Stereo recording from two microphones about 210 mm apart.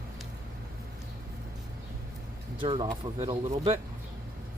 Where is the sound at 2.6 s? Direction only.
25° right (ahead or behind).